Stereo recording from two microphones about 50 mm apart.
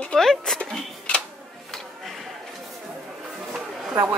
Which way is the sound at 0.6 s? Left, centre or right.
Left.